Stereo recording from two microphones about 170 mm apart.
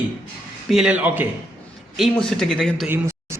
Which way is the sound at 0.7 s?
5° right (ahead or behind).